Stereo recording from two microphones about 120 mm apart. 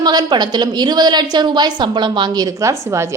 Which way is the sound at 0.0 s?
35° right (ahead or behind).